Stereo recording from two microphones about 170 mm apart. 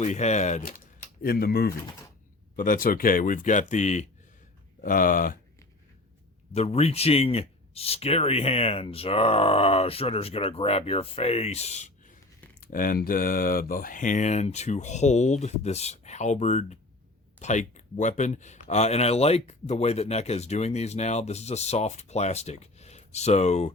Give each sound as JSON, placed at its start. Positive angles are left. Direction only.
{"t": 0.0, "sound": "speech", "side_deg": 40}
{"t": 1.2, "sound": "speech", "side_deg": 65}
{"t": 2.6, "sound": "speech", "side_deg": 55}
{"t": 4.8, "sound": "speech", "side_deg": 55}
{"t": 6.5, "sound": "speech", "side_deg": 40}
{"t": 12.5, "sound": "speech", "side_deg": 55}